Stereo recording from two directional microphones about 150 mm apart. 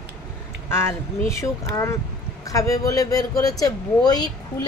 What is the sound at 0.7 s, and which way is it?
Speech, 15° left (ahead or behind).